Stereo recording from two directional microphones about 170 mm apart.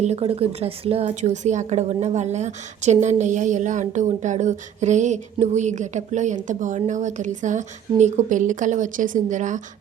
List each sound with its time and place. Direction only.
0.0 s a woman's voice: 35° right (ahead or behind)